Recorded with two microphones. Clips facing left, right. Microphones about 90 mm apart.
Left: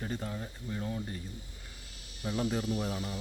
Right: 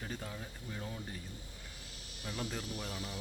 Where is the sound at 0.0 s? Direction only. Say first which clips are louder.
Left 6 dB; 5° left (ahead or behind).